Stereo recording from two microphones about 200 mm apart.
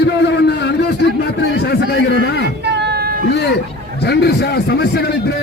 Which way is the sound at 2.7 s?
55° right (ahead or behind).